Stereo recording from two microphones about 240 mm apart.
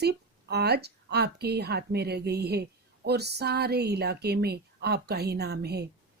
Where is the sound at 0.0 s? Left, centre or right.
Right.